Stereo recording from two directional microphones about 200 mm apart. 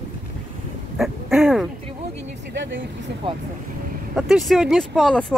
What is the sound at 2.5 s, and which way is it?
Speech, 60° right (ahead or behind).